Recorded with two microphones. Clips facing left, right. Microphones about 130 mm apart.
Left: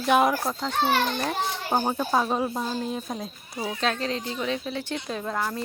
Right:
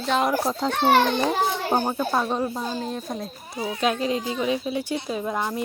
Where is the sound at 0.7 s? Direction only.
65° right (ahead or behind).